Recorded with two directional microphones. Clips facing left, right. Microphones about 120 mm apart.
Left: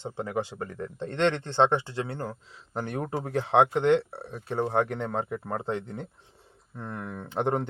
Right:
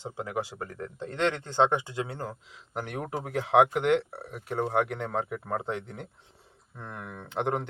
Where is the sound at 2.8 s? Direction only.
30° left (ahead or behind).